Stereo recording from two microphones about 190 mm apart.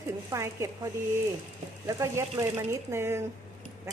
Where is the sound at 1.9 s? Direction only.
15° right (ahead or behind).